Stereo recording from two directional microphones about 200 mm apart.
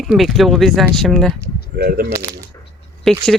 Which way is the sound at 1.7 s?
50° right (ahead or behind).